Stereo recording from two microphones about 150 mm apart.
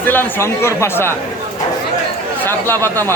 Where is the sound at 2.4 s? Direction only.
15° left (ahead or behind).